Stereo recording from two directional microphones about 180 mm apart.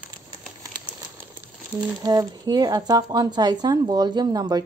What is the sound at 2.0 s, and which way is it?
Speech, 20° right (ahead or behind).